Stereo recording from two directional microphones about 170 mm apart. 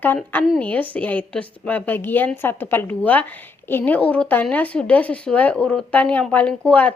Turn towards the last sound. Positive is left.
turn(degrees=10)  # may be behind; listen again after turning